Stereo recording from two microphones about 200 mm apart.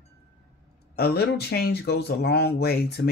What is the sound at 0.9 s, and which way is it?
Speech, 50° left (ahead or behind).